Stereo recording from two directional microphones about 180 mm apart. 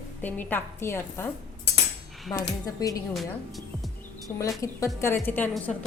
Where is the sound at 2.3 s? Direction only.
20° left (ahead or behind).